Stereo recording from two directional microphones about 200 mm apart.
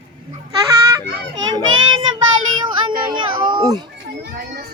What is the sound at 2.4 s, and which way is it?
Child singing, 90° right.